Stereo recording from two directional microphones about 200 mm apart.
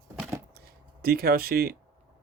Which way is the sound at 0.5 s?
50° right (ahead or behind).